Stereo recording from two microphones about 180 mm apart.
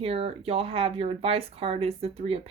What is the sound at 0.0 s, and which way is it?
Speech, 35° right (ahead or behind).